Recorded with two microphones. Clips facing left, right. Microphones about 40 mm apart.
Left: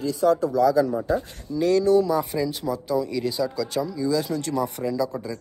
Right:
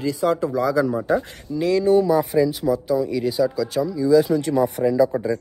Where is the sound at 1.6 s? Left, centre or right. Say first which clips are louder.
Even; centre.